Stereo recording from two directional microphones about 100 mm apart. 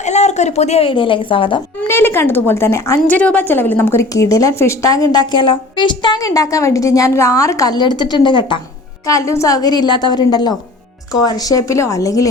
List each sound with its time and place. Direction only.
0.2 s a woman's voice: 90° left; by 1.6 s 60° left (ahead or behind)
1.9 s a woman's voice: 25° left (ahead or behind)
3.1 s a woman's voice: 15° left (ahead or behind); by 6.3 s 50° left (ahead or behind)
6.3 s a woman's voice: 35° left (ahead or behind); by 8.5 s 55° left (ahead or behind)
9.0 s a woman's voice: 30° left (ahead or behind)